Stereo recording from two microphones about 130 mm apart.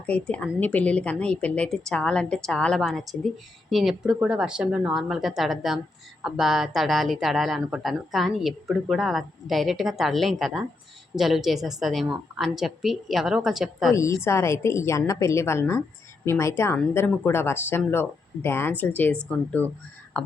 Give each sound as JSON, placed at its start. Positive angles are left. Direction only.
{"t": 0.0, "sound": "speech", "side_deg": 10}
{"t": 13.9, "sound": "a woman's voice", "side_deg": 20}